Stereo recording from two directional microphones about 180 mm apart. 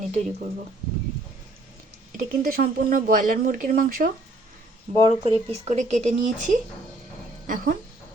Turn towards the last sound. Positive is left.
turn(degrees=-50)  # may be behind; listen again after turning